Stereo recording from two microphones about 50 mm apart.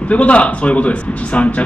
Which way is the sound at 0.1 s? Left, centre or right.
Left.